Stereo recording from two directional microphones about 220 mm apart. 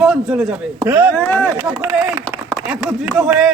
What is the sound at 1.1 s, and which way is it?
Speech, 10° left (ahead or behind).